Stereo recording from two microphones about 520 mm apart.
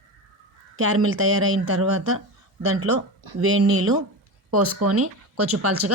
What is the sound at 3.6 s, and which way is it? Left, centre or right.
Speech, right.